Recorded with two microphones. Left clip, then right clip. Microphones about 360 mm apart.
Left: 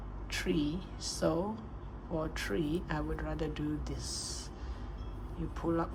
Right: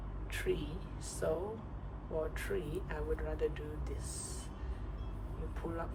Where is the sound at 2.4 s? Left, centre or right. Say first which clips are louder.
Left 4 dB; centre.